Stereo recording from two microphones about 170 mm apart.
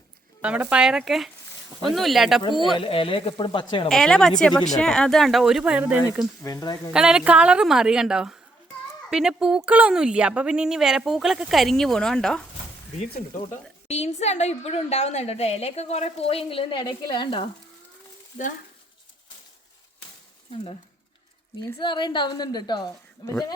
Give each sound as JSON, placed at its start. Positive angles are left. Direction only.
{"t": 0.4, "sound": "speech", "side_deg": -5}
{"t": 2.7, "sound": "a woman's voice", "side_deg": 30}
{"t": 3.8, "sound": "speech", "side_deg": 5}
{"t": 6.4, "sound": "a woman's voice", "side_deg": 20}
{"t": 6.9, "sound": "speech", "side_deg": -5}
{"t": 13.0, "sound": "a woman's voice", "side_deg": 45}
{"t": 21.8, "sound": "a woman's voice", "side_deg": 25}